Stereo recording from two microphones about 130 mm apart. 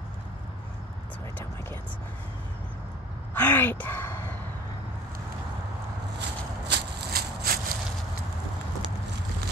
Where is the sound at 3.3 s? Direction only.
15° left (ahead or behind).